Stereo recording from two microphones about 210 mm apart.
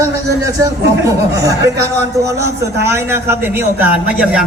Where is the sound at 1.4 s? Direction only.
15° right (ahead or behind).